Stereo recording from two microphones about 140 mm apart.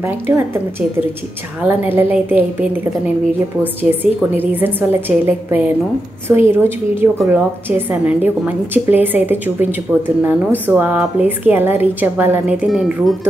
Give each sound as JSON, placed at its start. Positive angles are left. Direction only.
{"t": 0.0, "sound": "a woman's voice", "side_deg": -15}
{"t": 4.4, "sound": "a woman's voice", "side_deg": -15}